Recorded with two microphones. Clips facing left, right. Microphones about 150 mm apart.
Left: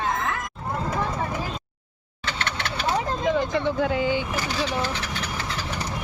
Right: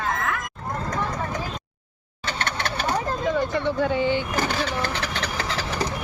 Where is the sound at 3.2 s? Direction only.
15° left (ahead or behind).